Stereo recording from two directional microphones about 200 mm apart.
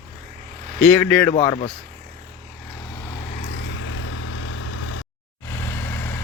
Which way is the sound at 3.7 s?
75° left (ahead or behind).